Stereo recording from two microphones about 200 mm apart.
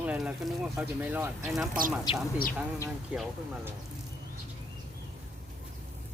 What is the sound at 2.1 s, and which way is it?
Speech, 25° left (ahead or behind).